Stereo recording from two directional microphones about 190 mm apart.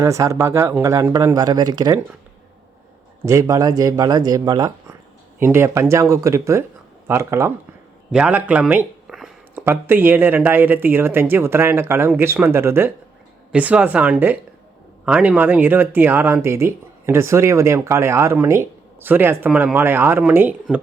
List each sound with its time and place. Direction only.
0.0 s speech: 15° right (ahead or behind)
3.2 s speech: 15° right (ahead or behind)